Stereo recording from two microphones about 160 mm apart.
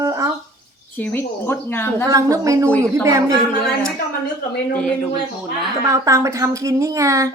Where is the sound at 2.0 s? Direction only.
20° right (ahead or behind).